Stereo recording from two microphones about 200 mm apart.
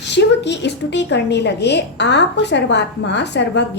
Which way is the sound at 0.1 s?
60° left (ahead or behind).